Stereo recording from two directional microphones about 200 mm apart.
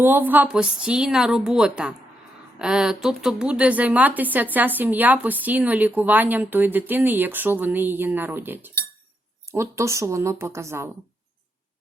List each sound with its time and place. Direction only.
0.0 s a woman's voice: 10° right (ahead or behind)